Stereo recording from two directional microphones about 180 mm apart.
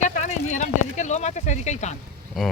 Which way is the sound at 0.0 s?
45° left (ahead or behind).